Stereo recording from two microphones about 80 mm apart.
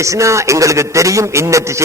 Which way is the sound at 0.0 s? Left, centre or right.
Right.